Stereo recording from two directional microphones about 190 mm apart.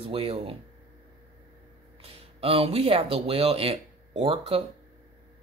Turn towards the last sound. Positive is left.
turn(degrees=-30)  # may be behind; listen again after turning